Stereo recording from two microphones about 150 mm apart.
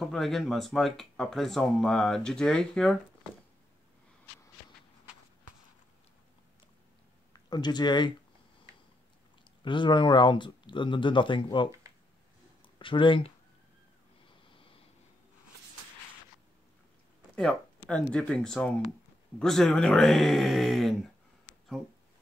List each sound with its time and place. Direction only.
0.0 s speech: centre (ahead or behind)
7.4 s speech: 30° left (ahead or behind)
9.7 s speech: 30° left (ahead or behind)
12.7 s speech: 35° left (ahead or behind)
14.5 s a sound: 35° left (ahead or behind)
17.8 s speech: 5° left (ahead or behind)